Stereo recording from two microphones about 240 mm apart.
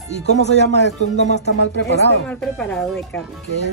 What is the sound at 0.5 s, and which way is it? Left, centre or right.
Speech, left.